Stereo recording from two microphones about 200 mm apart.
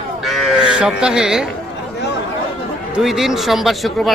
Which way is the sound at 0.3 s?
Centre (ahead or behind).